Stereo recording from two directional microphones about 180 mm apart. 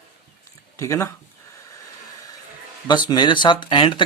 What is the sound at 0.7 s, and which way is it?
Speech, 15° left (ahead or behind).